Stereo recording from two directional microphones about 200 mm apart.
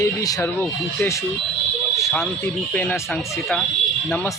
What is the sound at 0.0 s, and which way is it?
Speech, 15° left (ahead or behind).